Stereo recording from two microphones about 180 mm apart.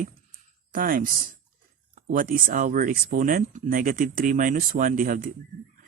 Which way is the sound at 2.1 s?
50° right (ahead or behind).